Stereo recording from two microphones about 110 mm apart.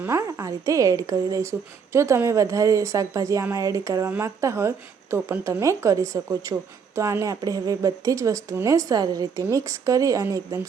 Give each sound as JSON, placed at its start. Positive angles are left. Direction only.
{"t": 0.0, "sound": "a woman's voice", "side_deg": -25}